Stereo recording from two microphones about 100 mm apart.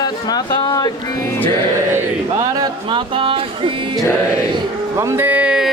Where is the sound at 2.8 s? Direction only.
60° right (ahead or behind).